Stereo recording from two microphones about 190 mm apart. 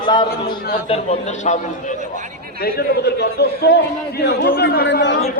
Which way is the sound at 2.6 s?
60° left (ahead or behind).